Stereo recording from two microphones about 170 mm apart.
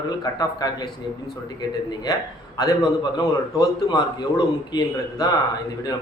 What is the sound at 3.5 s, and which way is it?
A man's voice, 25° left (ahead or behind).